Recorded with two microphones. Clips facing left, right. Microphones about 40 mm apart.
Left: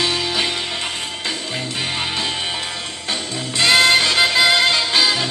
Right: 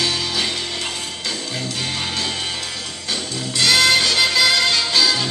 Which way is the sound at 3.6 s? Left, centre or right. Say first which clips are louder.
Left 2 dB; left.